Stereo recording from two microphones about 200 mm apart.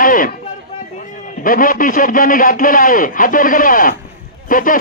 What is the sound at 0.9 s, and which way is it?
A man's voice, 40° left (ahead or behind).